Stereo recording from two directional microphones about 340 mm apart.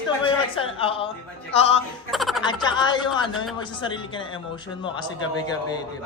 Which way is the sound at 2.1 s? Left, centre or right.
Centre.